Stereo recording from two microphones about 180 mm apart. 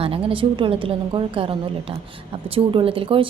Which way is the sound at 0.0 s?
30° right (ahead or behind).